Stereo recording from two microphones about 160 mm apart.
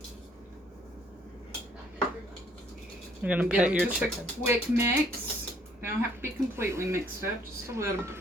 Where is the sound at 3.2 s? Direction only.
10° right (ahead or behind).